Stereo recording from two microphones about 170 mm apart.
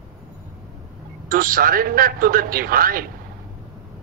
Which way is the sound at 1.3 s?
55° right (ahead or behind).